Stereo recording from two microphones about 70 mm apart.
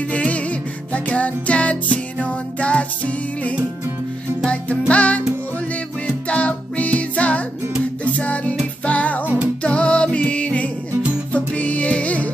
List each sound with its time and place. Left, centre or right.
0.1 s music: centre
9.2 s music: right
9.6 s music: centre